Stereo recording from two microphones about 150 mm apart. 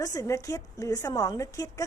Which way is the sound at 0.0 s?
25° left (ahead or behind).